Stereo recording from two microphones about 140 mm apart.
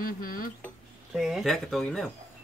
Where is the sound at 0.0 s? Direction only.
90° left.